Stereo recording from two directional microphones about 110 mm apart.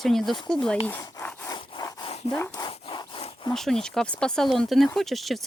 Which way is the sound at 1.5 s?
40° left (ahead or behind).